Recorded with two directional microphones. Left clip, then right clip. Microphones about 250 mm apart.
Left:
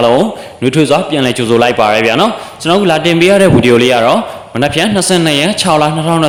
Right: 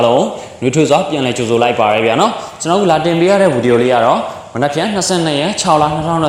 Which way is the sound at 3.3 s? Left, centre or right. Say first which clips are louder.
Left 3 dB; left.